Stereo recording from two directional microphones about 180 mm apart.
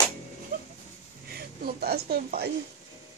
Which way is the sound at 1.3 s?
60° right (ahead or behind).